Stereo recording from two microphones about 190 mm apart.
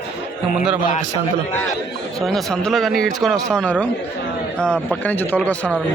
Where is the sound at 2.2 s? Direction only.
Centre (ahead or behind).